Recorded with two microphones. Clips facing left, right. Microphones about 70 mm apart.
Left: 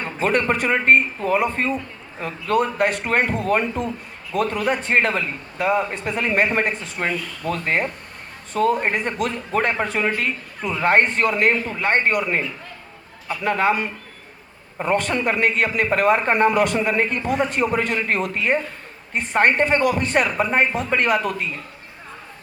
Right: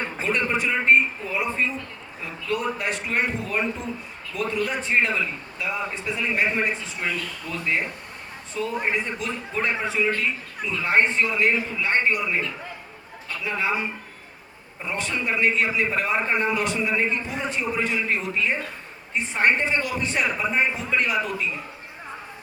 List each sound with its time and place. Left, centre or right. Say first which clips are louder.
0.2 s a man's voice: left 5 dB; left
13.4 s a man's voice: left 6 dB; left